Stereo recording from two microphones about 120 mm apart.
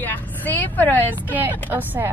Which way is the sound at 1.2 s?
15° right (ahead or behind).